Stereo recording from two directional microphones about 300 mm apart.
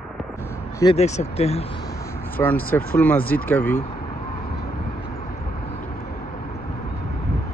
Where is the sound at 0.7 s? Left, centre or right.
Centre.